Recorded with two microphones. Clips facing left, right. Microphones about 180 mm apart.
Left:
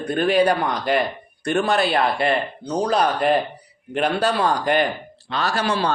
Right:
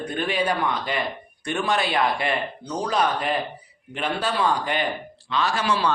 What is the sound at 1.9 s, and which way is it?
A man's voice, 35° left (ahead or behind).